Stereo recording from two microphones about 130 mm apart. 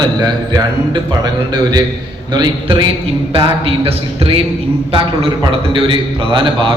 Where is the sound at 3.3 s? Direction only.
45° right (ahead or behind).